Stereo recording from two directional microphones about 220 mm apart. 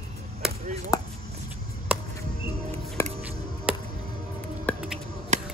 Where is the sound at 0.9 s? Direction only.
15° left (ahead or behind).